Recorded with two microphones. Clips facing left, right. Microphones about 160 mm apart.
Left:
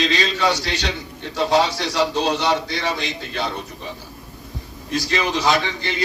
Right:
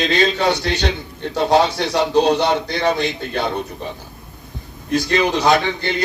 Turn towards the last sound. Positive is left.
turn(degrees=-55)  # may be behind; listen again after turning